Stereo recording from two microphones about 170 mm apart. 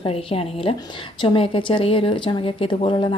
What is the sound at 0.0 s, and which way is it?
A woman's voice, 35° left (ahead or behind).